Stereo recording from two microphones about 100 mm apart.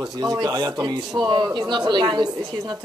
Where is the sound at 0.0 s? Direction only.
40° right (ahead or behind).